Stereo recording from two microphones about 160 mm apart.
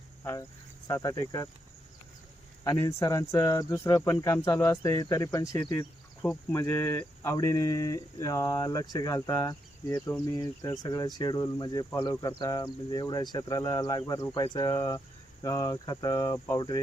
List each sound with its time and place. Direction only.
0.9 s speech: 20° left (ahead or behind)
2.6 s speech: 20° left (ahead or behind)